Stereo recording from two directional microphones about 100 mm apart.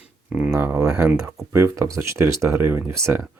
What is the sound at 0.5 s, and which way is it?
Speech, 25° right (ahead or behind).